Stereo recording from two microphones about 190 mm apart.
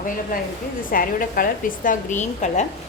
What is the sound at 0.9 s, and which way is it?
A woman's voice, 50° left (ahead or behind).